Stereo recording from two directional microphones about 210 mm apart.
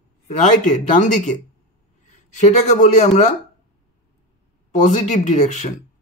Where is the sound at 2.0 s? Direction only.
35° left (ahead or behind).